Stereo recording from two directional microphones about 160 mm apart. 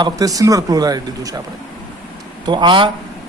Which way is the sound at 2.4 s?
30° right (ahead or behind).